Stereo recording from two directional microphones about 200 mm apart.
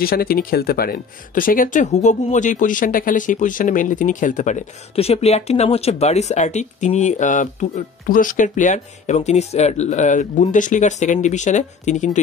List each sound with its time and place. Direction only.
0.0 s speech: 50° left (ahead or behind)